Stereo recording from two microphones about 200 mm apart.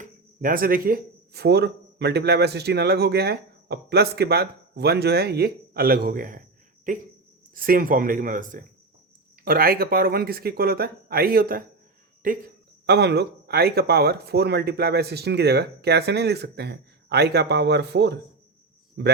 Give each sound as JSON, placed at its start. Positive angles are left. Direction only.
{"t": 0.0, "sound": "speech", "side_deg": -45}
{"t": 12.8, "sound": "speech", "side_deg": -55}